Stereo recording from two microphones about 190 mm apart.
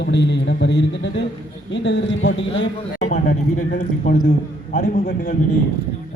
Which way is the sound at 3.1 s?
50° left (ahead or behind).